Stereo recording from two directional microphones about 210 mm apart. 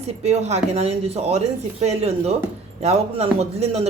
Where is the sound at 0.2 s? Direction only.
30° right (ahead or behind).